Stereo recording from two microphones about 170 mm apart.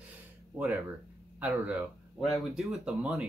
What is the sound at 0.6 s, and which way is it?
Speech, centre (ahead or behind).